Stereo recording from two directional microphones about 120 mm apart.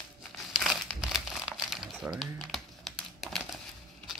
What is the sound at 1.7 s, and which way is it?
Typing, centre (ahead or behind).